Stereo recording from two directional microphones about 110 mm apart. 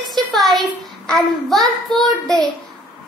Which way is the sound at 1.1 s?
Centre (ahead or behind).